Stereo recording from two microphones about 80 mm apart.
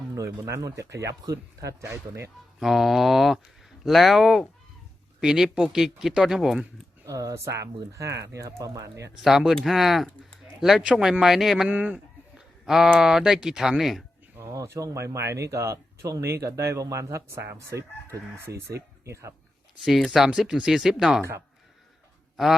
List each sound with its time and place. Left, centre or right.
0.2 s speech: right
2.6 s speech: centre
7.0 s speech: right
9.2 s speech: centre
11.7 s speech: centre
12.6 s speech: centre
14.3 s speech: right
19.0 s speech: right
19.8 s speech: centre
22.4 s speech: centre